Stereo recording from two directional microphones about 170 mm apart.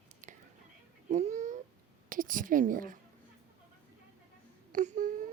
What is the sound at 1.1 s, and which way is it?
Babbling, 45° right (ahead or behind).